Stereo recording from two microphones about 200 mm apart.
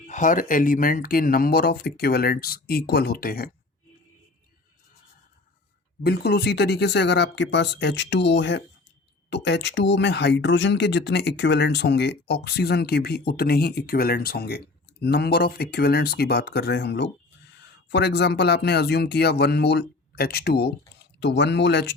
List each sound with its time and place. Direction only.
0.1 s speech: 40° left (ahead or behind)
6.0 s speech: 50° left (ahead or behind)